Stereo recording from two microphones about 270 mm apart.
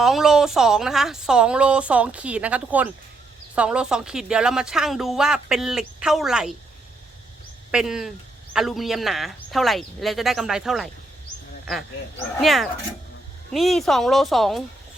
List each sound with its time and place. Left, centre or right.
0.0 s speech: centre
7.7 s speech: centre